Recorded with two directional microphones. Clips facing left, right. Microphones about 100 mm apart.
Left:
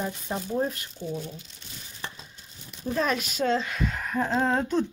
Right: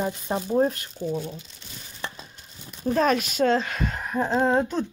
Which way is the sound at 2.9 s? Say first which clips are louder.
Right 5 dB; 55° right (ahead or behind).